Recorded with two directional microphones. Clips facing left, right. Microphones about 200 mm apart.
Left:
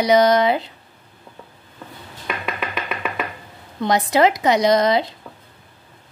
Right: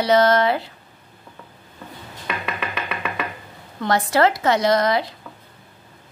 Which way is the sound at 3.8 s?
20° left (ahead or behind).